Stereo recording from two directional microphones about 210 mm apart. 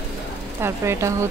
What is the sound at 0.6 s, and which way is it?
Speech, 10° right (ahead or behind).